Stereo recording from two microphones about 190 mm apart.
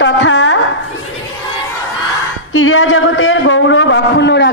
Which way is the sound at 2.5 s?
90° left.